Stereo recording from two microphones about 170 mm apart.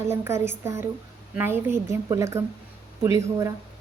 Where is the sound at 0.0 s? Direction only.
15° right (ahead or behind).